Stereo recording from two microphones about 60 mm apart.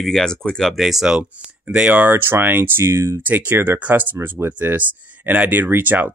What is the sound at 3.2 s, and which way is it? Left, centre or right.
Speech, right.